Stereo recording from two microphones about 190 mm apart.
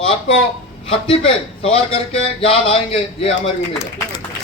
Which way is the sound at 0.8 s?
30° left (ahead or behind).